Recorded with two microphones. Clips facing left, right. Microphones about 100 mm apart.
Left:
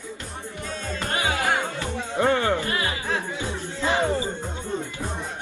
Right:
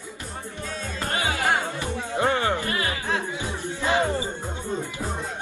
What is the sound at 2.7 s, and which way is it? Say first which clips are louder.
Music: even; 25° left (ahead or behind).